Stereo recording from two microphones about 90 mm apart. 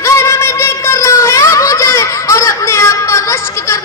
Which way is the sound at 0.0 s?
30° left (ahead or behind).